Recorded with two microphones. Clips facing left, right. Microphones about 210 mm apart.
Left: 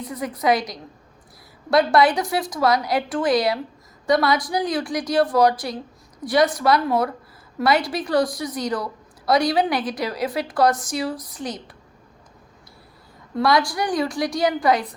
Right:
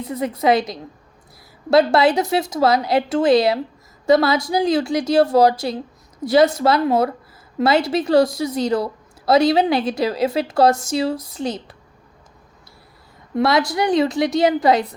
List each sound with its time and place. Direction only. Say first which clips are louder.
0.0 s a woman's voice: right 4 dB; 25° right (ahead or behind)
13.3 s a woman's voice: right 2 dB; 25° right (ahead or behind)